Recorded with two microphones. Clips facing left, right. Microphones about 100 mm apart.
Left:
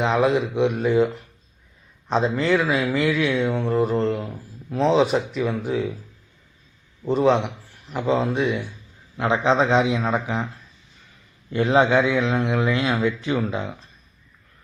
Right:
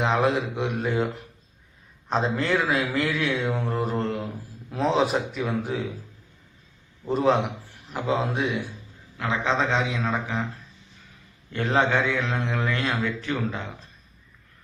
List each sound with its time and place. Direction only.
0.1 s a man's voice: centre (ahead or behind)
7.1 s a man's voice: centre (ahead or behind)
9.1 s a man's voice: 25° left (ahead or behind)
11.5 s a man's voice: 10° left (ahead or behind)